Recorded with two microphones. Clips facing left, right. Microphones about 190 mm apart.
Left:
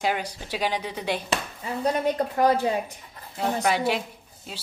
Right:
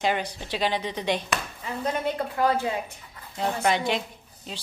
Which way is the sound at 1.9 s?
40° left (ahead or behind).